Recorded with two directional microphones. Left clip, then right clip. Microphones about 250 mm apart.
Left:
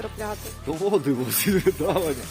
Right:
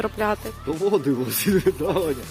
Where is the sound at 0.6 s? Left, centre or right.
Centre.